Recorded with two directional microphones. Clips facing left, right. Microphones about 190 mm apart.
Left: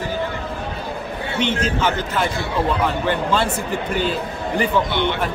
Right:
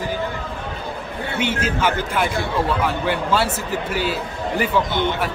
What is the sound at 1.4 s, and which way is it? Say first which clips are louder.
Speech: left 1 dB; 10° right (ahead or behind).